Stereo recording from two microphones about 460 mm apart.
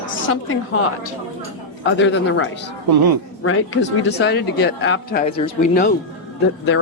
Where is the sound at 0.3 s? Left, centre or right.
Left.